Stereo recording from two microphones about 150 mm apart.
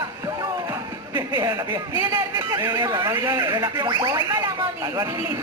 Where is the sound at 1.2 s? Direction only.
30° right (ahead or behind).